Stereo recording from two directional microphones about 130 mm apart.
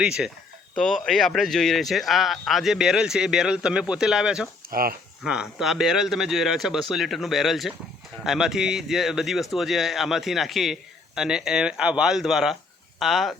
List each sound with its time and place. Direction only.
0.0 s a man's voice: 5° right (ahead or behind)
4.6 s a sound: 90° right
5.2 s a man's voice: 5° right (ahead or behind)